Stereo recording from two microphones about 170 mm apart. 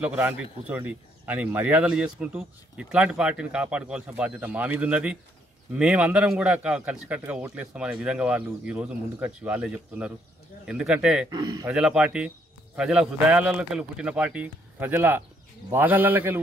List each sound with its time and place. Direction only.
0.0 s speech: 10° right (ahead or behind)
11.2 s speech: 25° right (ahead or behind)
11.6 s speech: 5° right (ahead or behind)